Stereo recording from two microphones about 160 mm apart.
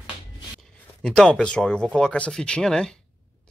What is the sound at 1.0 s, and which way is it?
Speech, 5° left (ahead or behind).